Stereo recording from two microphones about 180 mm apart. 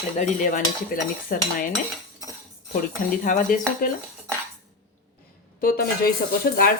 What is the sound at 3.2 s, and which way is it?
Speech, 45° left (ahead or behind).